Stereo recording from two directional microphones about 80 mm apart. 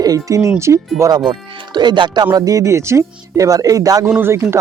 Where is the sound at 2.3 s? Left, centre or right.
Right.